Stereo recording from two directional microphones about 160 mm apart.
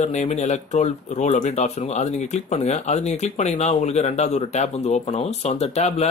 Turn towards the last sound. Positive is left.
turn(degrees=40)  # may be behind; listen again after turning